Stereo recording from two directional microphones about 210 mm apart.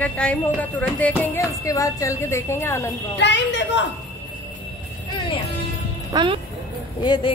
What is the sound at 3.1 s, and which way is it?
Speech, 55° left (ahead or behind).